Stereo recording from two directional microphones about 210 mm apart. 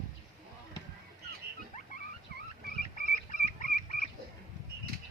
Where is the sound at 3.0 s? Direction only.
40° left (ahead or behind).